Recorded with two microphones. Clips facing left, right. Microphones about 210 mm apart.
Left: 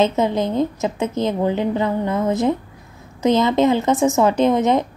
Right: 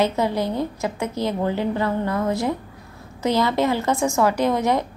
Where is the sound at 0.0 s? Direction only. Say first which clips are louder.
Left 3 dB; 20° left (ahead or behind).